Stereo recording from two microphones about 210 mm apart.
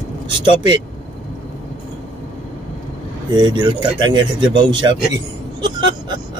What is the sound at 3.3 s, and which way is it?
Speech, 20° right (ahead or behind).